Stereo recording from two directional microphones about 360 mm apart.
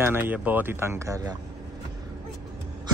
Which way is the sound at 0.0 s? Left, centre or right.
Centre.